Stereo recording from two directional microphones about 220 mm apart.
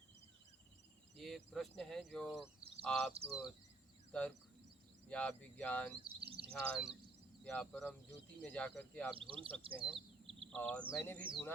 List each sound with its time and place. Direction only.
1.1 s speech: centre (ahead or behind)
2.6 s a sound: 25° right (ahead or behind)
2.8 s speech: centre (ahead or behind)
3.1 s speech: 25° right (ahead or behind)
4.1 s speech: 5° left (ahead or behind)
6.1 s speech: 25° right (ahead or behind)
6.5 s speech: 5° left (ahead or behind)
9.3 s speech: 25° right (ahead or behind)
9.9 s bird: 25° right (ahead or behind)
10.5 s speech: 5° left (ahead or behind)